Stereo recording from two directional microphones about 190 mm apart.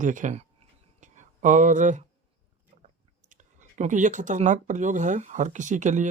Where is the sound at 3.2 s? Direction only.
40° right (ahead or behind).